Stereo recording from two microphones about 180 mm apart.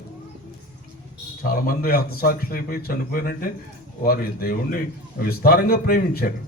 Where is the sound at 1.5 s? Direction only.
55° left (ahead or behind).